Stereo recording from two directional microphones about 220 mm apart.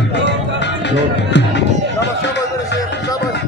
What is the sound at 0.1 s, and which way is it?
Music, 50° left (ahead or behind).